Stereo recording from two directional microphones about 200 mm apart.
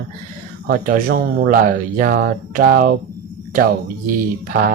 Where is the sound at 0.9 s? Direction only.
45° right (ahead or behind).